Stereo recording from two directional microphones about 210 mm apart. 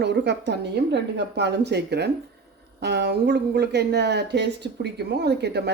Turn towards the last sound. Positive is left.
turn(degrees=-50)  # may be behind; listen again after turning